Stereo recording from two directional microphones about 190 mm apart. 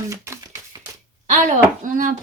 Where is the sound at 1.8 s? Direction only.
45° right (ahead or behind).